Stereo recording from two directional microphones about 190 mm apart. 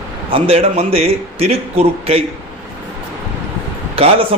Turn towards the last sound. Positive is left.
turn(degrees=-30)  # may be behind; listen again after turning